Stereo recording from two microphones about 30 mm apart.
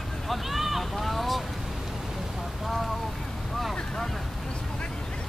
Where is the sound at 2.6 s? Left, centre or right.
Centre.